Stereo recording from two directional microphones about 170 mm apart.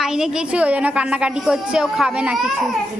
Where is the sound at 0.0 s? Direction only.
5° right (ahead or behind).